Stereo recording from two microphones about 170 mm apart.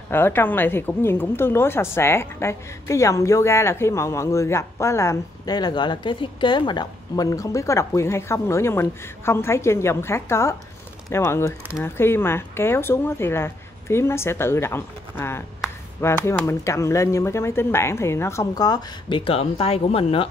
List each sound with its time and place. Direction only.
0.1 s a woman's voice: 10° left (ahead or behind); by 20.2 s 35° left (ahead or behind)